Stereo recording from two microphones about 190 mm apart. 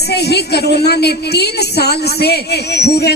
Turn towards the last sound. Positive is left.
turn(degrees=60)  # may be behind; listen again after turning